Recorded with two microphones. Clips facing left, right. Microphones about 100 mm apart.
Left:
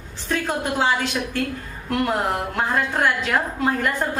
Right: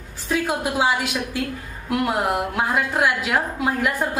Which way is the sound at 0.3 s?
10° right (ahead or behind).